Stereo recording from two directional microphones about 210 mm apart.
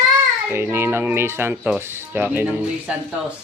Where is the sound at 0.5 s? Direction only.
10° right (ahead or behind).